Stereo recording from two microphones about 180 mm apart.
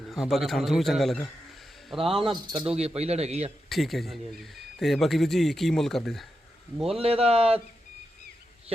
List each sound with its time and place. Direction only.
0.1 s speech: centre (ahead or behind)
2.0 s speech: 30° right (ahead or behind)
3.7 s speech: centre (ahead or behind)
7.0 s speech: 35° right (ahead or behind)